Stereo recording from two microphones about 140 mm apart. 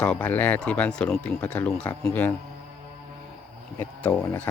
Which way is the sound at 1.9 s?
20° left (ahead or behind).